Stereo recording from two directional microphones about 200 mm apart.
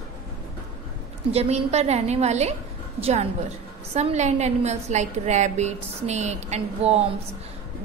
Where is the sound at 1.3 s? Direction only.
30° right (ahead or behind).